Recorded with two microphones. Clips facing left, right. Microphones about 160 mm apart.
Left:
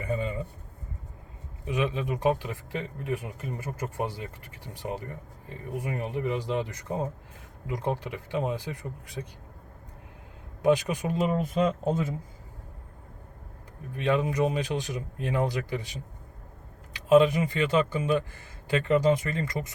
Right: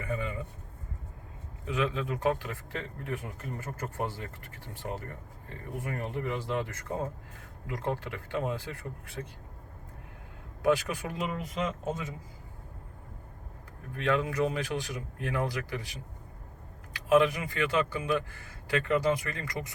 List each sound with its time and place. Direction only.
0.0 s a sound: 25° left (ahead or behind)
1.6 s speech: 20° left (ahead or behind)
10.6 s speech: 20° left (ahead or behind)
11.9 s speech: 30° left (ahead or behind)
13.9 s speech: 20° left (ahead or behind)